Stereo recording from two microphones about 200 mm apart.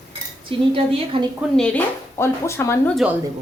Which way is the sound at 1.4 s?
5° left (ahead or behind).